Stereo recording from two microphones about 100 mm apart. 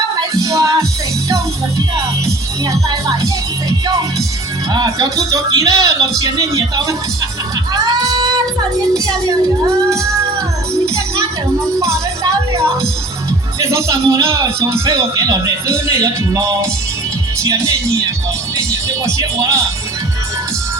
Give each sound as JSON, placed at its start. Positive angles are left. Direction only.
{"t": 0.2, "sound": "music", "side_deg": -35}
{"t": 2.6, "sound": "speech", "side_deg": -35}
{"t": 4.7, "sound": "speech", "side_deg": -40}
{"t": 7.7, "sound": "music", "side_deg": -40}
{"t": 9.0, "sound": "speech", "side_deg": -30}
{"t": 10.8, "sound": "music", "side_deg": -30}
{"t": 13.6, "sound": "speech", "side_deg": -30}
{"t": 18.5, "sound": "music", "side_deg": -30}